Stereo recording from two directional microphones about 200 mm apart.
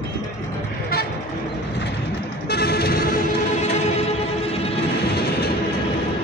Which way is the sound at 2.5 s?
50° left (ahead or behind).